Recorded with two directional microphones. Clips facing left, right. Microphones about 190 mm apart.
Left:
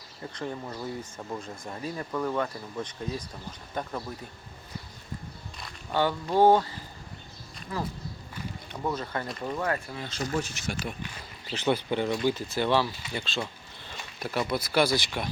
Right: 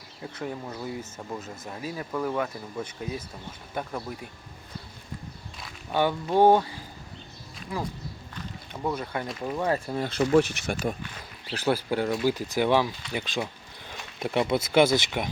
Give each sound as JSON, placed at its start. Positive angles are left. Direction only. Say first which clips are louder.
{"t": 0.2, "sound": "speech", "louder": "right 1 dB", "side_deg": -5}
{"t": 5.9, "sound": "speech", "louder": "right 2 dB", "side_deg": -15}
{"t": 9.9, "sound": "speech", "louder": "right 10 dB", "side_deg": -55}
{"t": 11.6, "sound": "speech", "louder": "right 1 dB", "side_deg": -5}
{"t": 13.1, "sound": "a sound", "louder": "right 3 dB", "side_deg": -15}
{"t": 14.2, "sound": "speech", "louder": "right 4 dB", "side_deg": -20}